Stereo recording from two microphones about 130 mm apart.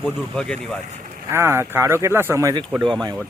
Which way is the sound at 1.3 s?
20° right (ahead or behind).